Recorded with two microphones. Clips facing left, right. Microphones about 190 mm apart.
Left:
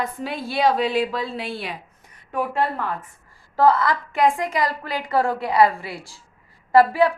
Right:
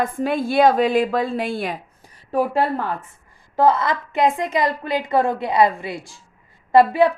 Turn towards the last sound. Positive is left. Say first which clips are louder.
# right 2 dB
turn(degrees=-20)  # may be behind; listen again after turning